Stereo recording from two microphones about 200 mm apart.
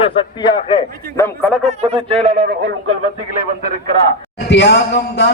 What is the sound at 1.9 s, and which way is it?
Speech, 25° right (ahead or behind).